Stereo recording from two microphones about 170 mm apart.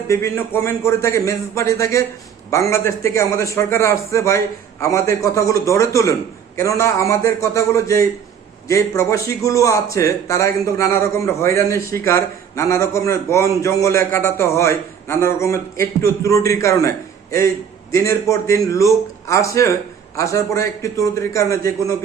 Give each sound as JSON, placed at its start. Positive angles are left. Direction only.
{"t": 0.1, "sound": "a man's voice", "side_deg": 15}
{"t": 17.9, "sound": "a man's voice", "side_deg": 15}